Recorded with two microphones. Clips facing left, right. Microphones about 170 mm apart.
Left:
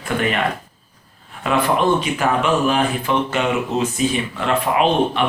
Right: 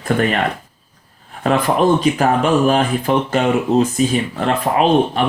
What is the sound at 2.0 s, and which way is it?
Speech, 40° right (ahead or behind).